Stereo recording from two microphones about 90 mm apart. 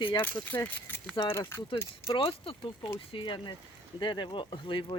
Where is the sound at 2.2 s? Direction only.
90° left.